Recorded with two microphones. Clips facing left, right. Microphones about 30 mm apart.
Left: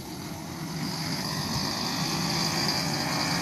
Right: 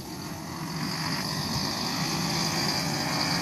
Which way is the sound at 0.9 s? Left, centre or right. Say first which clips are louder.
Right 2 dB; right.